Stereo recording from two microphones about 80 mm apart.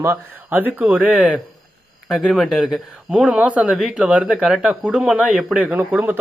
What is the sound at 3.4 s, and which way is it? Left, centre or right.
Speech, centre.